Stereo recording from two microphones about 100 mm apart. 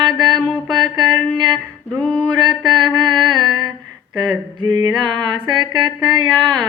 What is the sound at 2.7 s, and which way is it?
Mantra, 50° right (ahead or behind).